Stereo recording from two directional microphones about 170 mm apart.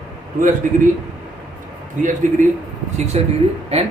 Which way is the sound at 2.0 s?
50° right (ahead or behind).